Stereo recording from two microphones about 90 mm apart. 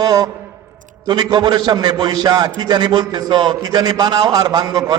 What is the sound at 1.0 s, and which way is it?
A man's voice, 50° right (ahead or behind).